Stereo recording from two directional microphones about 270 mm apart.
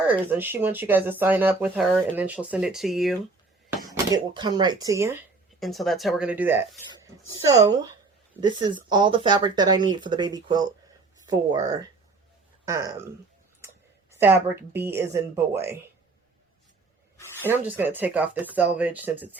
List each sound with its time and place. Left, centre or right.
0.1 s speech: centre
3.7 s speech: centre
5.5 s speech: centre
14.1 s speech: centre
17.4 s speech: centre